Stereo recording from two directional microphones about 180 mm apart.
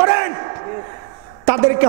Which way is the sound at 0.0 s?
20° right (ahead or behind).